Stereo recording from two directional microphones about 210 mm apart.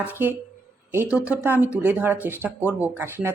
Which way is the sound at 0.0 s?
10° right (ahead or behind).